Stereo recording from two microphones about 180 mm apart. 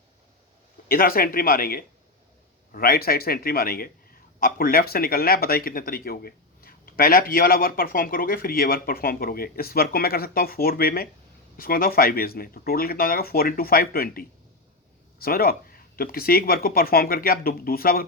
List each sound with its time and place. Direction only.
0.9 s speech: 55° left (ahead or behind)